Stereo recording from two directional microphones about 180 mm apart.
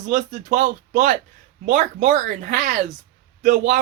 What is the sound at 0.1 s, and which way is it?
Speech, 45° right (ahead or behind).